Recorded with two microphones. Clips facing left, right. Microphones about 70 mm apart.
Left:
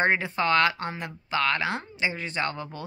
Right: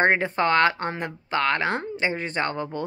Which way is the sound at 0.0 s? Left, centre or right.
Right.